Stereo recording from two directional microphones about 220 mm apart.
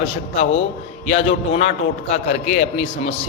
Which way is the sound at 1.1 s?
30° left (ahead or behind).